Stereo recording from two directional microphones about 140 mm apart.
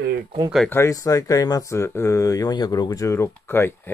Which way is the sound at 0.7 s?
20° left (ahead or behind).